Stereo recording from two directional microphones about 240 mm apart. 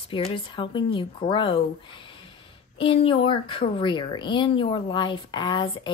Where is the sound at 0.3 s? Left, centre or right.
Centre.